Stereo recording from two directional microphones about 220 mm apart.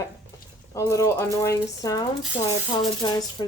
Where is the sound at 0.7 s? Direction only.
15° left (ahead or behind).